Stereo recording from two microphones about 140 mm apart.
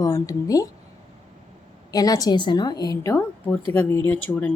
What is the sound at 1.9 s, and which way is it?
A woman's voice, 25° left (ahead or behind).